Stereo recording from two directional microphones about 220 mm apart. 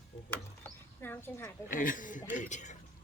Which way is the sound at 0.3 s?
10° left (ahead or behind).